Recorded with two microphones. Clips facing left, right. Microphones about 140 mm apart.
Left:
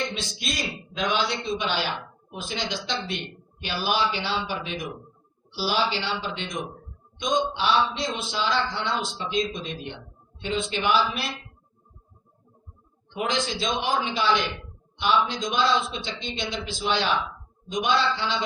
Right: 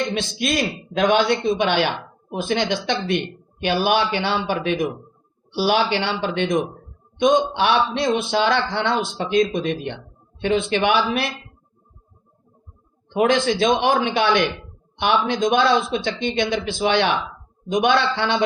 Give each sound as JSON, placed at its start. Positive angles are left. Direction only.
{"t": 0.1, "sound": "a man's voice", "side_deg": -60}
{"t": 13.1, "sound": "a man's voice", "side_deg": -60}